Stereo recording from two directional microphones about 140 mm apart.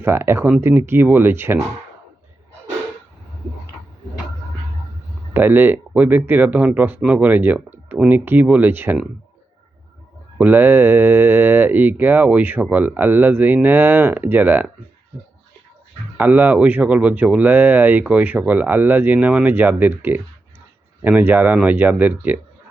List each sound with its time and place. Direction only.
0.0 s speech: 15° right (ahead or behind)
5.3 s speech: 15° right (ahead or behind)
10.3 s speech: 10° right (ahead or behind)
16.1 s speech: 10° right (ahead or behind)